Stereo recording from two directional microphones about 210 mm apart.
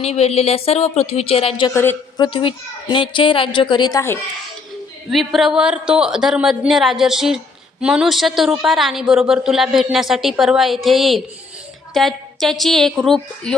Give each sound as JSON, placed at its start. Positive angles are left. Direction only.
{"t": 0.0, "sound": "a woman's voice", "side_deg": 30}
{"t": 1.7, "sound": "a woman's voice", "side_deg": 10}
{"t": 5.1, "sound": "a woman's voice", "side_deg": 0}